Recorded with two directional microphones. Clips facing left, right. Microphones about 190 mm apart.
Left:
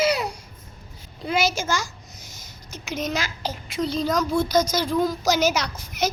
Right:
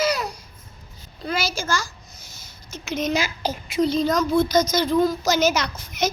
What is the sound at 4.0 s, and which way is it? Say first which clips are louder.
Speech: even; 10° left (ahead or behind).